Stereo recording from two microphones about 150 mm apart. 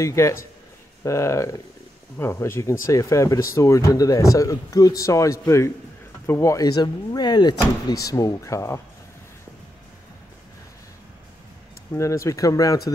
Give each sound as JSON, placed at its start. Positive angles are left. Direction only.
{"t": 0.0, "sound": "speech", "side_deg": 20}
{"t": 11.9, "sound": "speech", "side_deg": 20}